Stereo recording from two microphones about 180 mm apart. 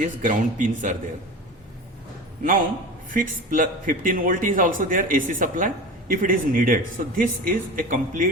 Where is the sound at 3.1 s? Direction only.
50° right (ahead or behind).